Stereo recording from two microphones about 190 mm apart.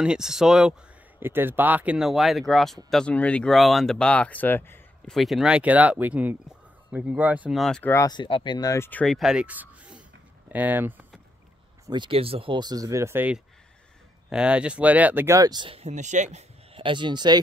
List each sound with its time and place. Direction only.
0.0 s speech: 5° right (ahead or behind)
11.8 s speech: 25° right (ahead or behind)